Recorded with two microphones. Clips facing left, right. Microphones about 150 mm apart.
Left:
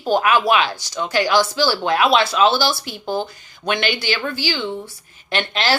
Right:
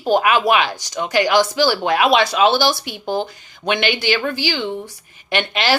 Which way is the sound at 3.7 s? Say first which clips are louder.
Right 3 dB; 15° right (ahead or behind).